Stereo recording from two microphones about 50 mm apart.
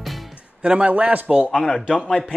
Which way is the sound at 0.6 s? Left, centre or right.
Right.